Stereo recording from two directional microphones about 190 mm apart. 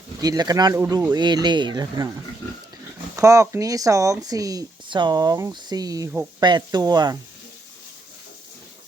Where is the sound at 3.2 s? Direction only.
15° right (ahead or behind).